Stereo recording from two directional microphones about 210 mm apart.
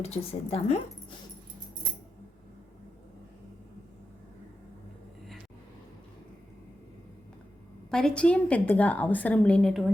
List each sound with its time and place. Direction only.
0.0 s speech: 30° left (ahead or behind)
7.9 s a woman's voice: 5° left (ahead or behind)